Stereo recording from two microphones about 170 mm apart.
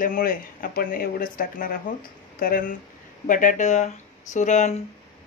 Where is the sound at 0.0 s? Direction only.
55° left (ahead or behind).